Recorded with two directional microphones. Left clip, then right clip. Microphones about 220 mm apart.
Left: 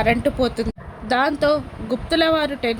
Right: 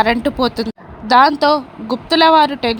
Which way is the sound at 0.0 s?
20° right (ahead or behind).